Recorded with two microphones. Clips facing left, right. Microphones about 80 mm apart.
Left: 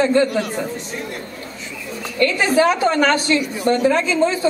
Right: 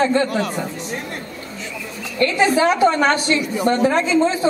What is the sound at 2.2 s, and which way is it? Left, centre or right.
A man's voice, right.